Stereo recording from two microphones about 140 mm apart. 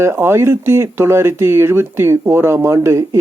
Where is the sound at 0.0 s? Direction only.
20° right (ahead or behind).